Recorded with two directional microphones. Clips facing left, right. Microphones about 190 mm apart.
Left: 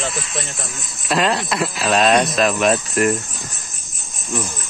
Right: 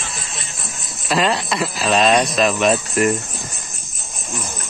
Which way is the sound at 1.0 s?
Centre (ahead or behind).